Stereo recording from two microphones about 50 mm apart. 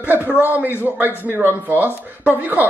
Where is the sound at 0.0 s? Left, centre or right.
Right.